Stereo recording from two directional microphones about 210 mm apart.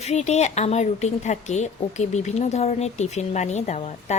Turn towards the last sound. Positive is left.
turn(degrees=35)  # may be behind; listen again after turning